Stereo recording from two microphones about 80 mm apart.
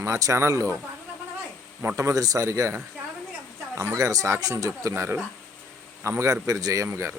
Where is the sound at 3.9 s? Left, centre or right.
Right.